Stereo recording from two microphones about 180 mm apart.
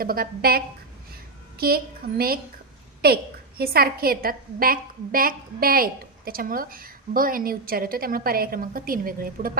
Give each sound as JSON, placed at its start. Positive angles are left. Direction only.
{"t": 0.0, "sound": "a woman's voice", "side_deg": -55}